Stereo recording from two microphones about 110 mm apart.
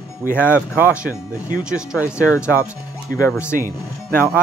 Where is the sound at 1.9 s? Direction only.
30° left (ahead or behind).